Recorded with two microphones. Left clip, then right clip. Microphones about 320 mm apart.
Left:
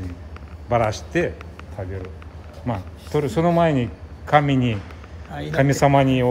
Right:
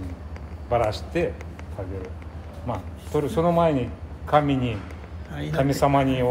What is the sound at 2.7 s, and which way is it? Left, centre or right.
A man's voice, left.